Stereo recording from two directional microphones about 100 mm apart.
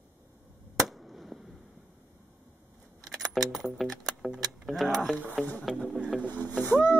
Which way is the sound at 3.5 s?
Centre (ahead or behind).